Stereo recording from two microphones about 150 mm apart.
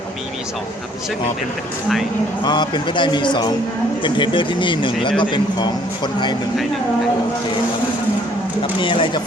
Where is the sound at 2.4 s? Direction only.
30° left (ahead or behind).